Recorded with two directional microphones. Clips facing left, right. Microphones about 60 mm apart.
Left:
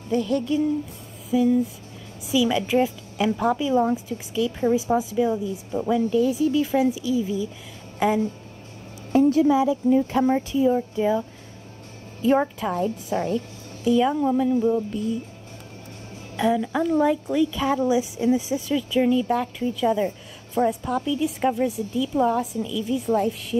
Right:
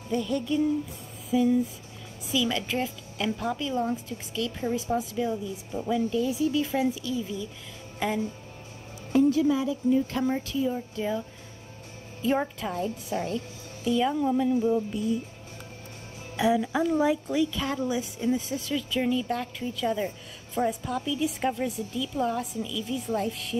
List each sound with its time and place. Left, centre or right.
0.1 s a woman's voice: centre
5.9 s a woman's voice: centre
9.1 s a woman's voice: left
9.8 s speech: left
12.2 s a woman's voice: centre
16.3 s a woman's voice: centre